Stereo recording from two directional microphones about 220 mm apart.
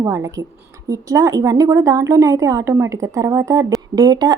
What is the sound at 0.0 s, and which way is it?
Speech, 15° right (ahead or behind).